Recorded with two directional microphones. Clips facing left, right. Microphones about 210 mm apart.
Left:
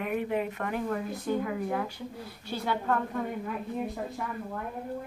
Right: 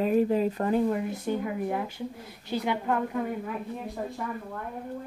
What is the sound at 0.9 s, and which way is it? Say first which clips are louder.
A woman's voice: right 2 dB; 20° right (ahead or behind).